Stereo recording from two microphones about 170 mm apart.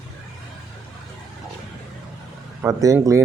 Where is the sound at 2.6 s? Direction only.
20° right (ahead or behind).